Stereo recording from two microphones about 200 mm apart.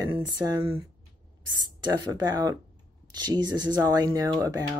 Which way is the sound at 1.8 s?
20° right (ahead or behind).